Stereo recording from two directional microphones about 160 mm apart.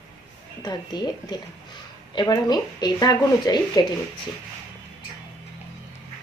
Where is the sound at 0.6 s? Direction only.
25° left (ahead or behind).